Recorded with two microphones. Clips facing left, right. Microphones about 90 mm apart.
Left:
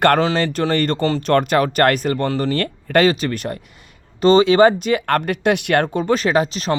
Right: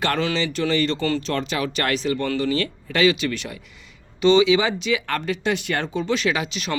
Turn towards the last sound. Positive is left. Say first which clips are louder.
# left 6 dB
turn(degrees=40)  # may be behind; listen again after turning